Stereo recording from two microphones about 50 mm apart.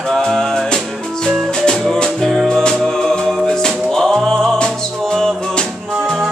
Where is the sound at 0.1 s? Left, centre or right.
Centre.